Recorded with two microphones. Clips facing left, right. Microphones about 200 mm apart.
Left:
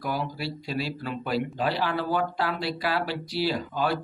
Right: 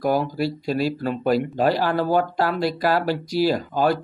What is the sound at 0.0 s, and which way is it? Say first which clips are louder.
Speech: right 9 dB; 45° right (ahead or behind).